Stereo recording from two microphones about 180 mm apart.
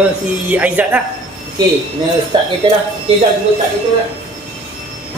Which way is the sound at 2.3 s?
25° right (ahead or behind).